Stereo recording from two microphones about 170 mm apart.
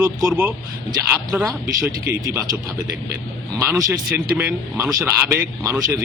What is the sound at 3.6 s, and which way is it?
Speech, 20° right (ahead or behind).